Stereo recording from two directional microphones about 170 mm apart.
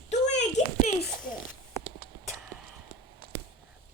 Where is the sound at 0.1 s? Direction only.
40° left (ahead or behind).